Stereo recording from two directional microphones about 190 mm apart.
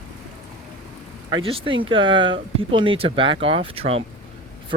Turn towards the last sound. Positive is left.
turn(degrees=-30)  # may be behind; listen again after turning